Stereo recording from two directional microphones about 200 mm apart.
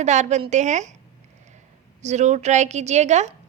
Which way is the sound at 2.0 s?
35° right (ahead or behind).